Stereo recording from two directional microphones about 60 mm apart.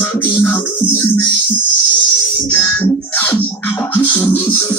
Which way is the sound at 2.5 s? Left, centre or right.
Left.